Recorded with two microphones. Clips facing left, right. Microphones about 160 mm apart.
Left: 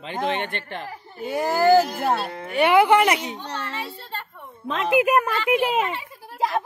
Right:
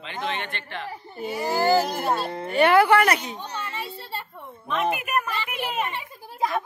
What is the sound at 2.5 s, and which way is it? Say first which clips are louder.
Speech: left 1 dB; 15° left (ahead or behind).